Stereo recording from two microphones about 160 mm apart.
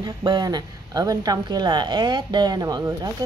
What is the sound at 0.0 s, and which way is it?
Speech, 25° right (ahead or behind).